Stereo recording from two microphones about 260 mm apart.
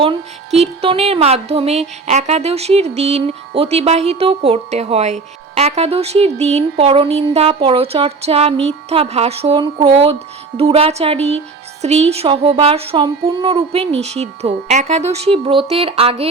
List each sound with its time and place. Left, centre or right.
0.0 s music: right